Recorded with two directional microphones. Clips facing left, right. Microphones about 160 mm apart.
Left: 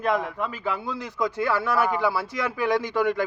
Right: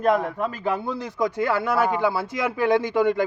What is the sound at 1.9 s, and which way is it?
A man's voice, 20° right (ahead or behind).